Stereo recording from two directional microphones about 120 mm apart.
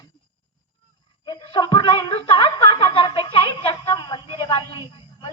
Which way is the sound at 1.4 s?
45° left (ahead or behind).